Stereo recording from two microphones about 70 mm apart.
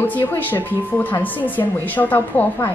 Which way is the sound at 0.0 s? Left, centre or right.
Left.